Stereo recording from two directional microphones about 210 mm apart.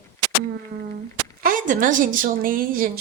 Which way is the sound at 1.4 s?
40° right (ahead or behind).